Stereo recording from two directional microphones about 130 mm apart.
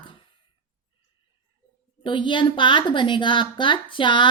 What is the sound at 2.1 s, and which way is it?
A woman's voice, 40° left (ahead or behind).